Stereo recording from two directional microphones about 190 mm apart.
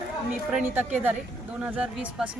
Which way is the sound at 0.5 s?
10° right (ahead or behind).